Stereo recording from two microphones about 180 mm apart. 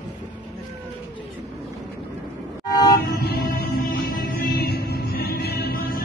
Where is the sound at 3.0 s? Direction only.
60° left (ahead or behind).